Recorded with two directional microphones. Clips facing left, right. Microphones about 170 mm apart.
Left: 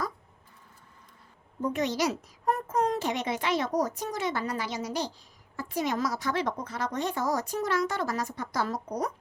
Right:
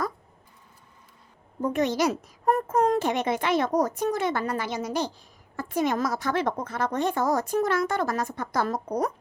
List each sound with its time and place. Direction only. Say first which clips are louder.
1.6 s a woman's voice: right 4 dB; 50° right (ahead or behind)